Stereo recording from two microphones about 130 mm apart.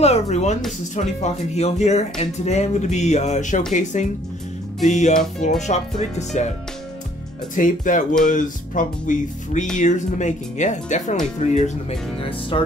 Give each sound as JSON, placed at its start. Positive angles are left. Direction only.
{"t": 0.0, "sound": "speech", "side_deg": 55}
{"t": 7.5, "sound": "speech", "side_deg": 90}
{"t": 8.3, "sound": "music", "side_deg": 85}
{"t": 9.8, "sound": "speech", "side_deg": 70}
{"t": 12.2, "sound": "speech", "side_deg": 45}